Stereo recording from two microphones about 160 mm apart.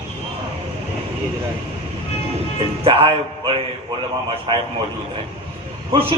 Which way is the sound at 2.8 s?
35° right (ahead or behind).